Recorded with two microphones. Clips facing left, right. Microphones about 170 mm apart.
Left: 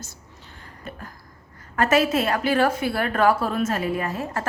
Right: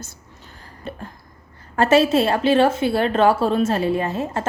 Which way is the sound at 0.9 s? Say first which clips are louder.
Right 5 dB; 30° right (ahead or behind).